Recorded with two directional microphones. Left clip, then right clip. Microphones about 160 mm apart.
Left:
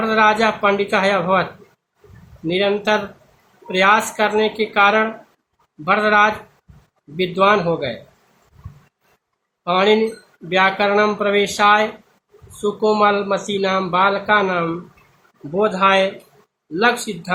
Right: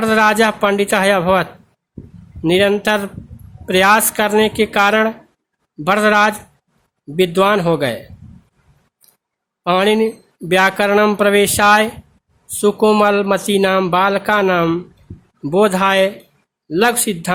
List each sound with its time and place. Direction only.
0.0 s speech: 70° right (ahead or behind)
2.5 s speech: 70° right (ahead or behind)
9.6 s speech: 70° right (ahead or behind)